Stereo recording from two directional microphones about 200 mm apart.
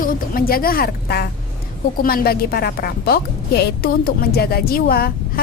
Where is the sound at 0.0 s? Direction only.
45° left (ahead or behind).